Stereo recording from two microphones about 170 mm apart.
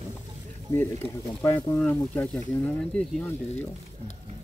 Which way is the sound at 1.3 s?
25° left (ahead or behind).